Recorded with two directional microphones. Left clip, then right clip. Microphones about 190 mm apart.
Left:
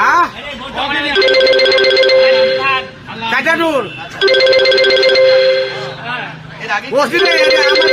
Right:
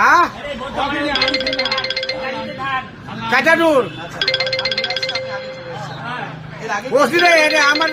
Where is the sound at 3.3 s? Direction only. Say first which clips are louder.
Even; 60° right (ahead or behind).